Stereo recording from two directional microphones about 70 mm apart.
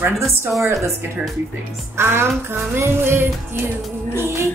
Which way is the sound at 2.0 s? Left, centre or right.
Right.